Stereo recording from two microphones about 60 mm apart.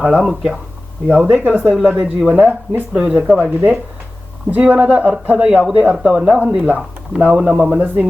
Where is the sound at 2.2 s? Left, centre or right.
Right.